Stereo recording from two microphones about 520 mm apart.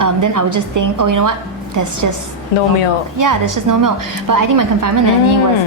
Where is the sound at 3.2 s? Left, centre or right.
Right.